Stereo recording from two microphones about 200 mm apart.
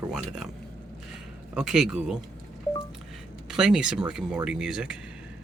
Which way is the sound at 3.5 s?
5° right (ahead or behind).